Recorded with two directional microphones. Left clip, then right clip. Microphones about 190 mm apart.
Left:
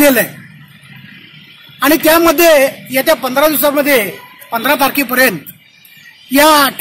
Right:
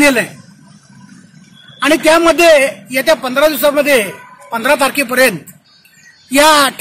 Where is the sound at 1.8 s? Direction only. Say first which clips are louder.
Even; 45° left (ahead or behind); by 6.7 s 5° right (ahead or behind).